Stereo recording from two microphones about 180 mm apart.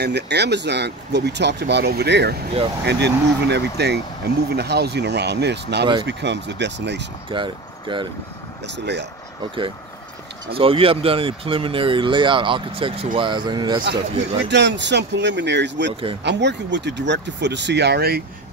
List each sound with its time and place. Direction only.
0.0 s speech: 70° right (ahead or behind)
7.2 s speech: 25° right (ahead or behind)
8.6 s speech: 75° right (ahead or behind)
10.5 s speech: 30° right (ahead or behind)
14.4 s speech: 75° right (ahead or behind)